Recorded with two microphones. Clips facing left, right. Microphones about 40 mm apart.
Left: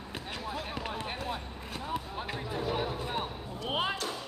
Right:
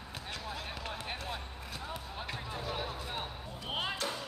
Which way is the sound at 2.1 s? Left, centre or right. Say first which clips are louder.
Left 4 dB; centre.